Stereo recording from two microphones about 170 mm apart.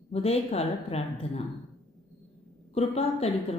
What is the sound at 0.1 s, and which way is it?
Speech, 35° left (ahead or behind).